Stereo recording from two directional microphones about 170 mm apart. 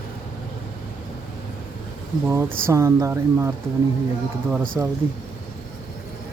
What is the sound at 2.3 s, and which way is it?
Speech, 15° right (ahead or behind).